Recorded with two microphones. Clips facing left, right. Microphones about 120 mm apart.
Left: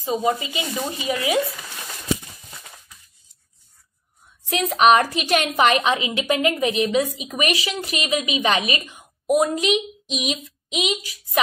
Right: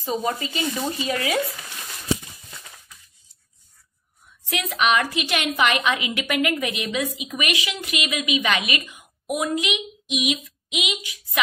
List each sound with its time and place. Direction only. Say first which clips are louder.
0.0 s speech: left 3 dB; 15° left (ahead or behind)
4.5 s a woman's voice: left 6 dB; 35° left (ahead or behind)